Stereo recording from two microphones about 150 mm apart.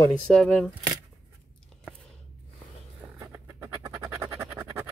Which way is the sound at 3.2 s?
20° right (ahead or behind).